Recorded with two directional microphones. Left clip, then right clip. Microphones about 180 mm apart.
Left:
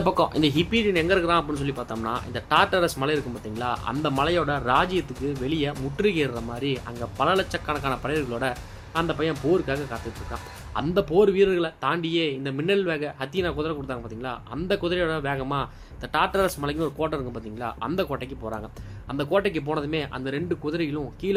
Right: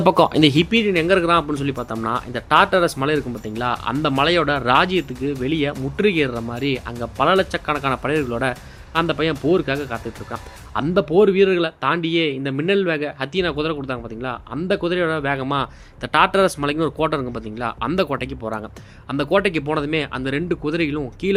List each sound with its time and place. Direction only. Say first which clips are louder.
0.0 s speech: right 7 dB; 50° right (ahead or behind)